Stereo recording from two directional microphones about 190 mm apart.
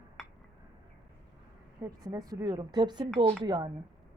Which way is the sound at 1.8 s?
20° right (ahead or behind).